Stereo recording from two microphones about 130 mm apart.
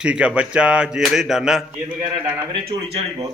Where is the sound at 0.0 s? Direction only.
10° right (ahead or behind).